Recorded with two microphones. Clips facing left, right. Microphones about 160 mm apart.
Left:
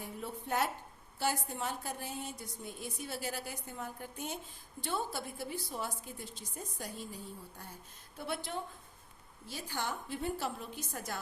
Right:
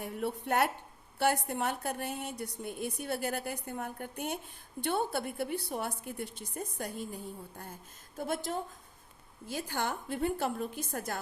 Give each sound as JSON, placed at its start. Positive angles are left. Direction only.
{"t": 0.0, "sound": "a woman's voice", "side_deg": -65}
{"t": 9.5, "sound": "a woman's voice", "side_deg": -55}